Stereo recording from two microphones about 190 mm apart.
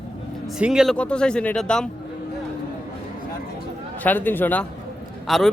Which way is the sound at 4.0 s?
10° left (ahead or behind).